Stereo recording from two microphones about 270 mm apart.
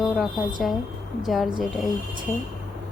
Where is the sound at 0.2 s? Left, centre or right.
Centre.